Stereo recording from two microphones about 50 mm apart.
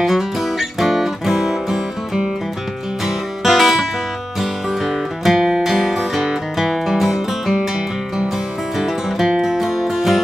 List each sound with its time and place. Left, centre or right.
0.0 s music: centre